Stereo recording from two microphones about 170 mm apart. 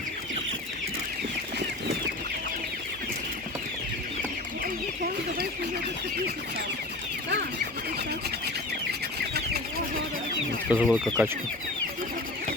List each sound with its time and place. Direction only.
4.6 s chicken: 60° right (ahead or behind)
8.9 s chicken: 70° right (ahead or behind)
10.7 s speech: 5° right (ahead or behind)